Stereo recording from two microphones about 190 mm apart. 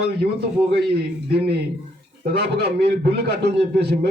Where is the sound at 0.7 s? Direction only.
55° right (ahead or behind).